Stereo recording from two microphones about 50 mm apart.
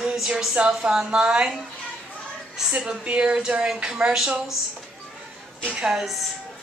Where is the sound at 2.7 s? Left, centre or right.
Right.